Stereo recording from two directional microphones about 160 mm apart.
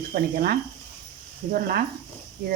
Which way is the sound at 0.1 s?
70° right (ahead or behind).